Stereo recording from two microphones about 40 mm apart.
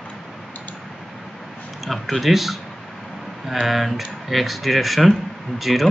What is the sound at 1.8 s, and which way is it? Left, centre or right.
Speech, centre.